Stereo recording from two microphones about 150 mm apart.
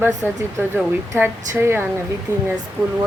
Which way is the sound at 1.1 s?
15° right (ahead or behind).